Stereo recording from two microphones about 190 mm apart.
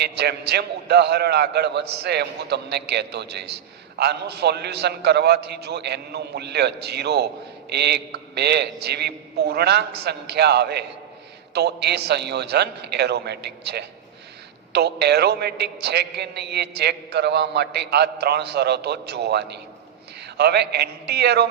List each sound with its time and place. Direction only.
0.0 s a man's voice: 60° right (ahead or behind)